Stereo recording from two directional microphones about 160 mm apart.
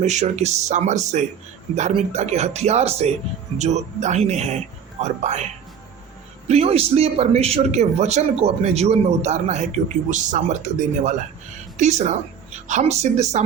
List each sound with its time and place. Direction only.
0.0 s speech: 45° right (ahead or behind)
6.5 s speech: 40° right (ahead or behind)